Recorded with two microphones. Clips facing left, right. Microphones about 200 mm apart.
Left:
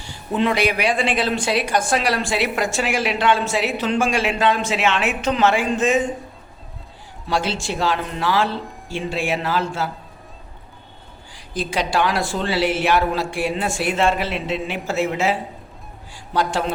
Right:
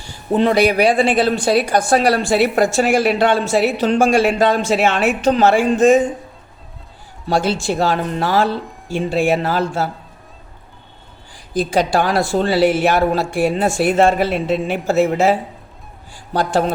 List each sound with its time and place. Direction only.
0.3 s speech: 40° right (ahead or behind)
7.3 s a woman's voice: 45° right (ahead or behind)
11.6 s a woman's voice: 45° right (ahead or behind)